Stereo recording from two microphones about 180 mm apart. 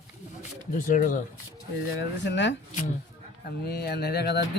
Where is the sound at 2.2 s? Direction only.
80° left.